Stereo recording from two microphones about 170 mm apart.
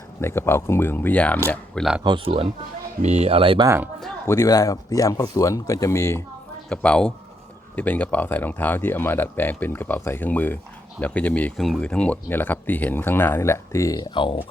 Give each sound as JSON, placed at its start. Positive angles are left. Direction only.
{"t": 0.2, "sound": "speech", "side_deg": 15}
{"t": 2.0, "sound": "speech", "side_deg": -30}
{"t": 4.3, "sound": "speech", "side_deg": 20}
{"t": 6.7, "sound": "speech", "side_deg": 5}